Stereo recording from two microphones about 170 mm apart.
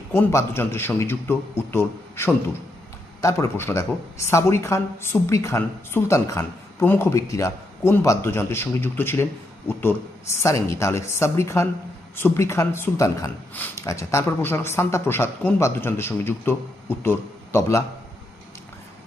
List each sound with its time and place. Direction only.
0.1 s a man's voice: 15° left (ahead or behind)
10.4 s a man's voice: 15° left (ahead or behind)